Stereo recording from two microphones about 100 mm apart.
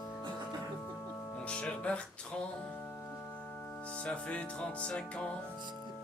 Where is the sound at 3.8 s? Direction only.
10° left (ahead or behind).